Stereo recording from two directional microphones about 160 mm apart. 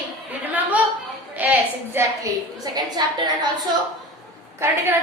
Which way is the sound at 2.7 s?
25° right (ahead or behind).